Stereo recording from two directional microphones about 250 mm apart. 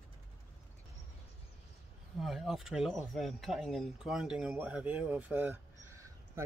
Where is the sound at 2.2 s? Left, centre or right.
Centre.